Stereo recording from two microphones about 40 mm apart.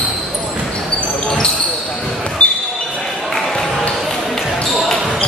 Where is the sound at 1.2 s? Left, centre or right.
Centre.